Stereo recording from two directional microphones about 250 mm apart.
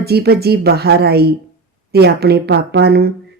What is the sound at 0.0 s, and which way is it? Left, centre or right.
Speech, right.